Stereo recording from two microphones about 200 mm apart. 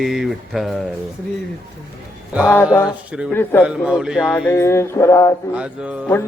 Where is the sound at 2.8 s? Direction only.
5° right (ahead or behind).